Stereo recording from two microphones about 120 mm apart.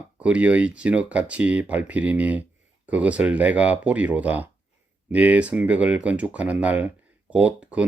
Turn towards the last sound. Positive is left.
turn(degrees=-10)  # may be behind; listen again after turning